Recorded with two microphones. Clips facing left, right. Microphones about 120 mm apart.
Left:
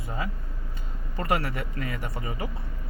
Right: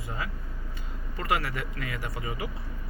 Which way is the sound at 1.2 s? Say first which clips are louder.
Left 2 dB; 30° left (ahead or behind).